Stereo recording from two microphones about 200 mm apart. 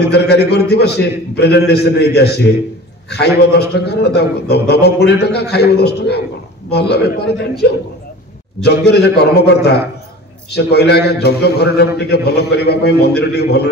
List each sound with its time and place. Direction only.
0.0 s a man's voice: 55° left (ahead or behind)
8.6 s a man's voice: 55° left (ahead or behind)